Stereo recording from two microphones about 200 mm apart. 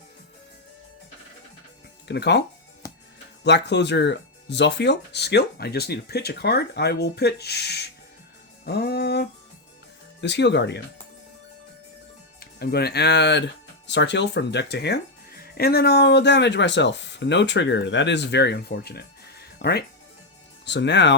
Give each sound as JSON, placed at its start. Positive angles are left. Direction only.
{"t": 2.0, "sound": "speech", "side_deg": 60}
{"t": 2.8, "sound": "music", "side_deg": 15}
{"t": 3.4, "sound": "speech", "side_deg": 60}
{"t": 8.6, "sound": "music", "side_deg": 55}
{"t": 10.2, "sound": "speech", "side_deg": 60}
{"t": 12.4, "sound": "speech", "side_deg": 50}